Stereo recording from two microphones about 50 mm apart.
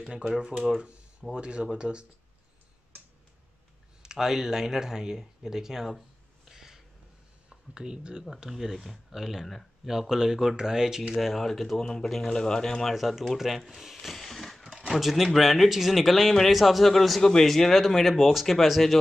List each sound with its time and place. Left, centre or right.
0.0 s speech: centre
0.6 s speech: centre
1.3 s speech: centre
4.0 s speech: centre
6.5 s a sound: centre
7.4 s speech: centre
8.5 s speech: centre
11.1 s speech: centre
12.8 s speech: centre
14.6 s speech: centre